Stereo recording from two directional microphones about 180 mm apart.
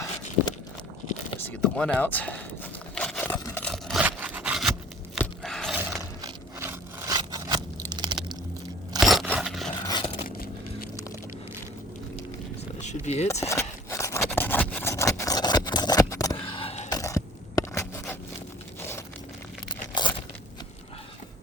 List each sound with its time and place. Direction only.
1.5 s speech: 5° left (ahead or behind)
2.9 s a sound: 5° left (ahead or behind)
4.0 s sawing: 10° right (ahead or behind)
5.1 s a sound: 5° left (ahead or behind)
6.2 s scrape: 15° right (ahead or behind)
9.0 s crunch: centre (ahead or behind)
9.8 s a sound: 25° left (ahead or behind)
12.8 s vehicle: 40° left (ahead or behind)
13.4 s rub: 15° left (ahead or behind)
16.4 s a sound: 30° left (ahead or behind)
16.9 s scrape: 20° left (ahead or behind)
19.6 s tearing: 25° left (ahead or behind)